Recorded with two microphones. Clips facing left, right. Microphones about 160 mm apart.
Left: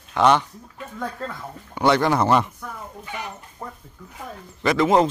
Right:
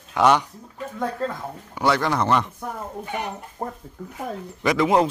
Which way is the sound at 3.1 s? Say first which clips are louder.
Right 2 dB; 55° right (ahead or behind).